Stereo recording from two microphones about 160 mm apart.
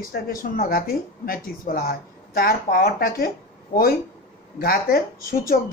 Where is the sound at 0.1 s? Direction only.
65° left (ahead or behind).